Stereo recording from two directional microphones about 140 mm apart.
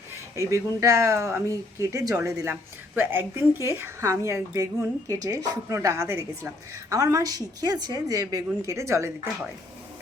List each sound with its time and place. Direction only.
0.3 s a woman's voice: 20° right (ahead or behind)